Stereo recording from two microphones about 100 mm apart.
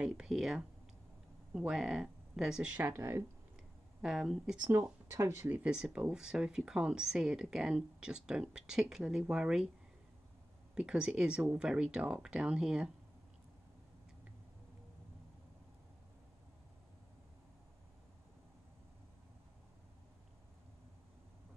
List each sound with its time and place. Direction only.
0.0 s speech: 5° right (ahead or behind)
1.7 s speech: 5° right (ahead or behind)
2.7 s speech: 20° right (ahead or behind)
4.0 s speech: 5° right (ahead or behind)
5.1 s speech: 30° right (ahead or behind)
5.5 s speech: 10° right (ahead or behind)
10.7 s speech: 5° right (ahead or behind)